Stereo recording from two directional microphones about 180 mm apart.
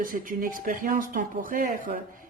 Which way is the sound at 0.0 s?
50° right (ahead or behind).